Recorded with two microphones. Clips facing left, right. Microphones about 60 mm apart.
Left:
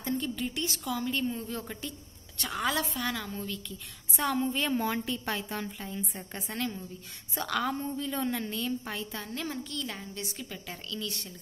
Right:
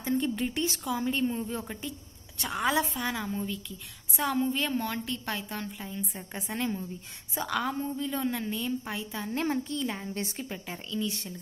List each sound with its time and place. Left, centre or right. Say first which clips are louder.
0.4 s a woman's voice: right 3 dB; right; by 3.6 s centre
4.2 s a woman's voice: right 1 dB; centre
6.4 s a woman's voice: right 3 dB; centre
7.3 s a woman's voice: right 1 dB; centre
9.3 s a woman's voice: right 9 dB; right
10.1 s a woman's voice: right 4 dB; right
10.7 s a woman's voice: right 5 dB; right